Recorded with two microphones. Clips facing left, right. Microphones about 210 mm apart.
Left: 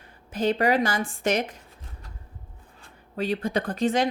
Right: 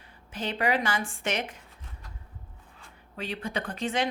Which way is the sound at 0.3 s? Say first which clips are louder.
Left 6 dB; 40° left (ahead or behind).